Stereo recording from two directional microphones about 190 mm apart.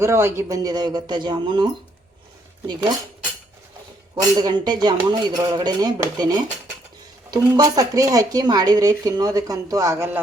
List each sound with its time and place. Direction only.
0.0 s speech: 15° right (ahead or behind)
4.1 s speech: 20° right (ahead or behind)